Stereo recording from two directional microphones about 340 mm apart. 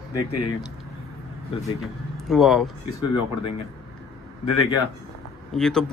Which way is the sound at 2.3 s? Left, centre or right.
Centre.